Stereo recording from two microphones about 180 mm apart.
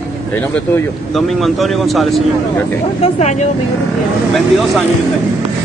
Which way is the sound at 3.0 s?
40° left (ahead or behind).